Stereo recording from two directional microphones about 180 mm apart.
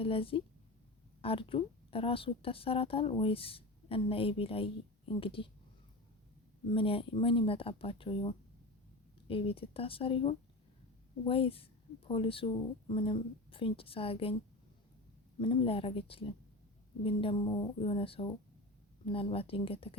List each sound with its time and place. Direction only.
0.0 s a woman's voice: 30° left (ahead or behind)
6.7 s a woman's voice: 30° left (ahead or behind)
15.4 s a woman's voice: 30° left (ahead or behind)